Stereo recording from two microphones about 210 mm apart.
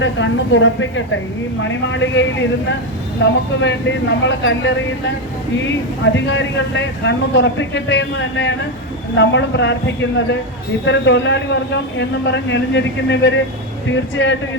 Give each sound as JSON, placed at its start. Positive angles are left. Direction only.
{"t": 0.0, "sound": "a man's voice", "side_deg": 60}
{"t": 6.1, "sound": "a man's voice", "side_deg": 60}